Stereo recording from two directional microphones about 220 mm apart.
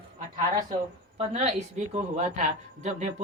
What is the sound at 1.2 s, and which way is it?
Speech, 30° right (ahead or behind).